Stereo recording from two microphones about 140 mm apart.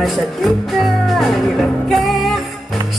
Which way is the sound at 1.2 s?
Centre (ahead or behind).